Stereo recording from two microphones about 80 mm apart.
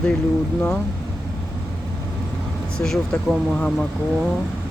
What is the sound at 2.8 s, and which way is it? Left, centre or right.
Speech, centre.